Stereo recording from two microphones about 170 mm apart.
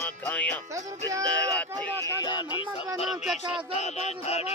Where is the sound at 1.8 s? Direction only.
20° left (ahead or behind).